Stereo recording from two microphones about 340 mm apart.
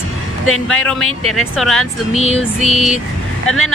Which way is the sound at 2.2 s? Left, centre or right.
Centre.